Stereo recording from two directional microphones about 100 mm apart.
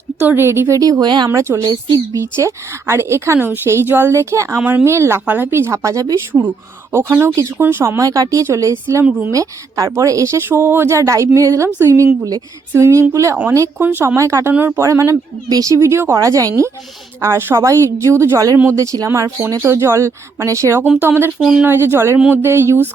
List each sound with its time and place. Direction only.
0.2 s speech: 20° right (ahead or behind); by 1.3 s 45° right (ahead or behind)
1.3 s a woman's voice: 25° right (ahead or behind)
6.9 s a woman's voice: 25° right (ahead or behind)
13.8 s a woman's voice: 20° right (ahead or behind)
21.3 s speech: centre (ahead or behind)
21.6 s a woman's voice: 20° right (ahead or behind)